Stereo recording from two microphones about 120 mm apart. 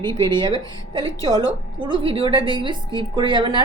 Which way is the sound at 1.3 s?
40° right (ahead or behind).